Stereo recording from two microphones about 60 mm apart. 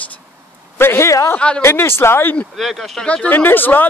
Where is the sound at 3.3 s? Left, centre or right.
Left.